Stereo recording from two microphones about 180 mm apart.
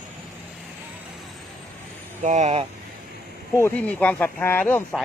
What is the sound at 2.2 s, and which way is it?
Speech, 40° right (ahead or behind).